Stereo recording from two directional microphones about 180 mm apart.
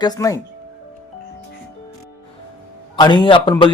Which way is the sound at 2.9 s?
25° left (ahead or behind).